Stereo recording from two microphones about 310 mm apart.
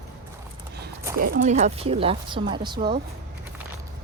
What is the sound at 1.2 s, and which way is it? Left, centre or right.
Speech, right.